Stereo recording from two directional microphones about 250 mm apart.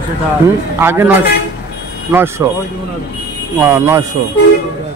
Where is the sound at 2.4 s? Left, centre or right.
Centre.